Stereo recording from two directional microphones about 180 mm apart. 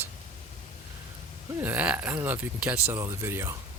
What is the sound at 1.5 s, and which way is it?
Speech, 10° right (ahead or behind).